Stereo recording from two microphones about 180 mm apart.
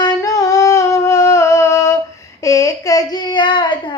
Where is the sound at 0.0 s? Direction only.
20° left (ahead or behind).